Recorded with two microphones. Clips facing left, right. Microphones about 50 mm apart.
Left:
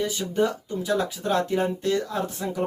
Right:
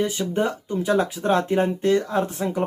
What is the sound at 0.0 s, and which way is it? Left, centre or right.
Speech, right.